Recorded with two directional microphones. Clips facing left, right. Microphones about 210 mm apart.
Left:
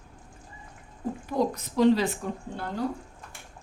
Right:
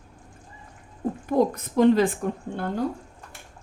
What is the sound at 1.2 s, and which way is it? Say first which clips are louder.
A woman's voice: right 5 dB; 50° right (ahead or behind).